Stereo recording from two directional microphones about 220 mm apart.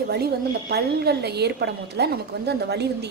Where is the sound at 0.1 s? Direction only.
45° right (ahead or behind).